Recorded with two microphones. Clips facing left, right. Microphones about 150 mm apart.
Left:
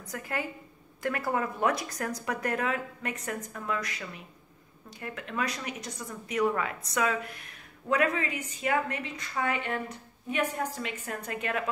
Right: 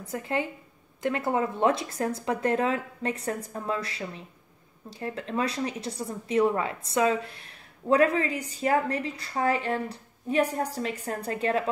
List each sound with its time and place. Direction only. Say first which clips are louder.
0.0 s a woman's voice: right 5 dB; 25° right (ahead or behind)